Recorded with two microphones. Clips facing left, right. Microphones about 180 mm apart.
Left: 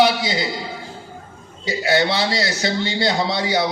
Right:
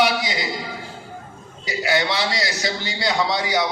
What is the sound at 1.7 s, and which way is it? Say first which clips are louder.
A man's voice: left 3 dB; 30° left (ahead or behind).